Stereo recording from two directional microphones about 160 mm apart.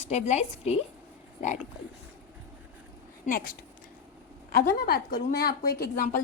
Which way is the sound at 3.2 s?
60° left (ahead or behind).